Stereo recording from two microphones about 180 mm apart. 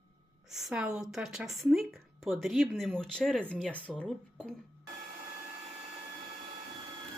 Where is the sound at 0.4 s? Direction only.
Centre (ahead or behind).